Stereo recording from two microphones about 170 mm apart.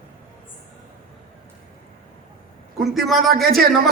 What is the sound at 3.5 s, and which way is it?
Speech, 60° right (ahead or behind).